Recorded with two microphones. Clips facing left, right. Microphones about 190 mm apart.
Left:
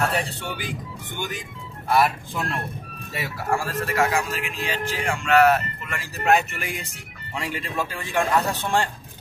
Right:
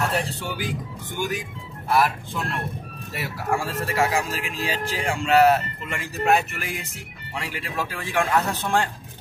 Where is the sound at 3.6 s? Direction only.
30° right (ahead or behind).